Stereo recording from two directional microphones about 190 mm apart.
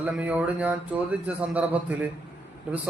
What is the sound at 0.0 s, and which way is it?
Speech, 5° right (ahead or behind).